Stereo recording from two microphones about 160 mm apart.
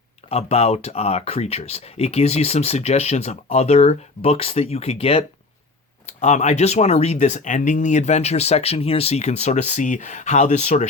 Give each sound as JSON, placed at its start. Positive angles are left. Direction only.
{"t": 0.3, "sound": "speech", "side_deg": 40}